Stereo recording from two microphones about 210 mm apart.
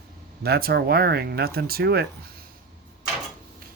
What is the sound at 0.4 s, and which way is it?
Speech, 50° right (ahead or behind).